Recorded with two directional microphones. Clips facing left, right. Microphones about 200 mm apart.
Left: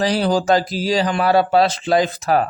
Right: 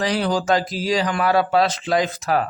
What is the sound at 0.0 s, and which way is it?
Speech, 30° left (ahead or behind).